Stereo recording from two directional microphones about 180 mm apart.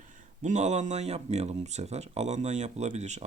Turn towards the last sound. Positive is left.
turn(degrees=-40)  # may be behind; listen again after turning